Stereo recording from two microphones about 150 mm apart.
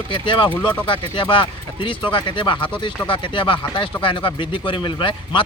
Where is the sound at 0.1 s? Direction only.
35° left (ahead or behind).